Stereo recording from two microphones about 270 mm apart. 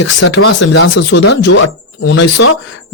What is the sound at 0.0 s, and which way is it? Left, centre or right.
Speech, left.